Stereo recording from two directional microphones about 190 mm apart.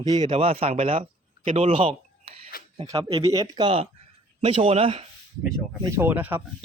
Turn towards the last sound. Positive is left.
turn(degrees=-10)  # may be behind; listen again after turning